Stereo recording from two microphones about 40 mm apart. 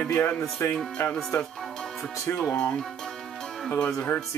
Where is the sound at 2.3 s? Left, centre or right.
Left.